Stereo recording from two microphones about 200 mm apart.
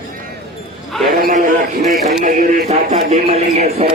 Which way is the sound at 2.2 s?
35° right (ahead or behind).